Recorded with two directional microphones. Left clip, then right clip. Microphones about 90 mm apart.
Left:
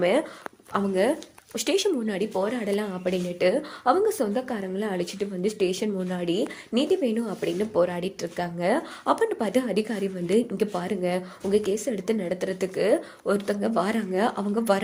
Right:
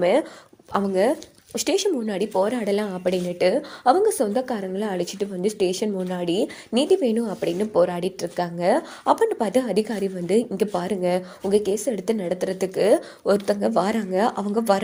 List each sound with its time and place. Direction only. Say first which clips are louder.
0.0 s a woman's voice: right 3 dB; 20° right (ahead or behind)
0.7 s speech: right 3 dB; 50° right (ahead or behind)
1.5 s a woman's voice: right 2 dB; 30° right (ahead or behind)
2.1 s a woman's voice: right 4 dB; 50° right (ahead or behind); by 6.5 s 30° right (ahead or behind)
6.7 s a woman's voice: right 4 dB; 45° right (ahead or behind)
8.2 s a woman's voice: right 4 dB; 30° right (ahead or behind)
10.6 s a woman's voice: right 3 dB; 35° right (ahead or behind)
12.8 s speech: right 5 dB; 70° right (ahead or behind)
13.4 s a woman's voice: right 4 dB; 50° right (ahead or behind)